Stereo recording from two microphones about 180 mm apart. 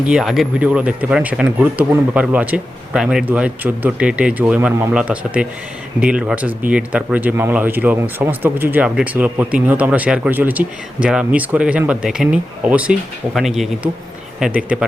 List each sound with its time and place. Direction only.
0.1 s speech: centre (ahead or behind)